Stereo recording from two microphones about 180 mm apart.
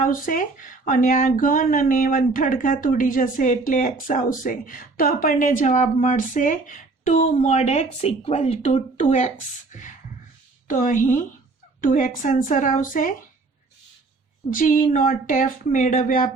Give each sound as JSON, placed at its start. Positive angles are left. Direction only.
{"t": 0.0, "sound": "speech", "side_deg": 45}
{"t": 10.7, "sound": "speech", "side_deg": 45}
{"t": 14.5, "sound": "speech", "side_deg": 50}